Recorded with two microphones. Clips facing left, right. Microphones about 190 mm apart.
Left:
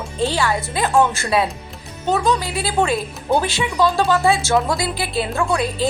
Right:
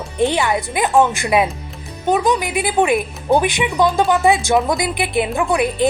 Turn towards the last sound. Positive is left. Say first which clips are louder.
# right 3 dB
turn(degrees=-15)  # may be behind; listen again after turning